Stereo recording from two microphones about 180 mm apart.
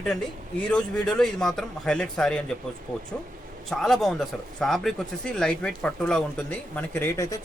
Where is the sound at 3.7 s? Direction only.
Centre (ahead or behind).